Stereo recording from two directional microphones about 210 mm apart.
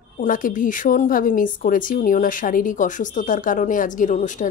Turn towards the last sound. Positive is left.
turn(degrees=35)  # may be behind; listen again after turning